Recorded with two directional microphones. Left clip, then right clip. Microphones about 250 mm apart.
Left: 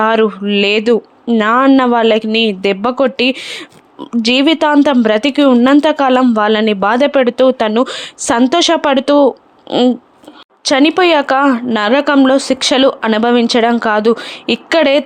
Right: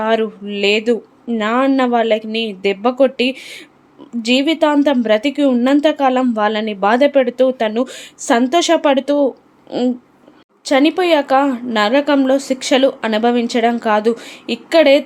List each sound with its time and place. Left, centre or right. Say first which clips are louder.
0.0 s speech: left 5 dB; centre